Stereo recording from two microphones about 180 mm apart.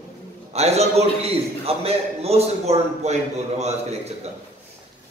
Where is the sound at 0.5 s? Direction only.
35° right (ahead or behind).